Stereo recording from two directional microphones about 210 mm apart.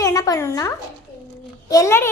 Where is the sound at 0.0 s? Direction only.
15° left (ahead or behind).